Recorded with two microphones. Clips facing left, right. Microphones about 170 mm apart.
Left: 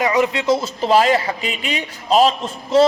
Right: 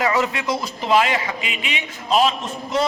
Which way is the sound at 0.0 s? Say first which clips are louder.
Left 3 dB; 20° left (ahead or behind).